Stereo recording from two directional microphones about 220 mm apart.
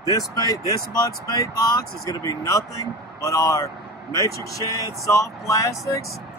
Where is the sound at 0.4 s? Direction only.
15° left (ahead or behind).